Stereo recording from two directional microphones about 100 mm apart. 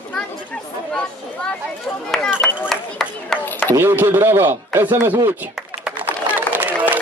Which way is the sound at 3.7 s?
20° right (ahead or behind).